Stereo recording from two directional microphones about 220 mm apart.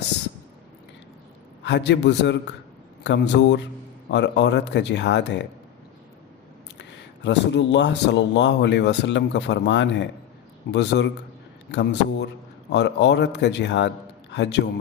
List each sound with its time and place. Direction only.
1.6 s speech: 55° left (ahead or behind)
6.7 s speech: 55° left (ahead or behind)